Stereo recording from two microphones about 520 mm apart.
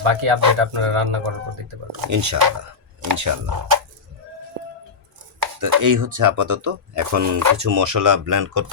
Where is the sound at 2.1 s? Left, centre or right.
Right.